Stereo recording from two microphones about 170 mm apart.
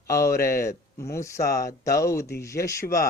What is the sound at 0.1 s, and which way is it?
Speech, 20° left (ahead or behind).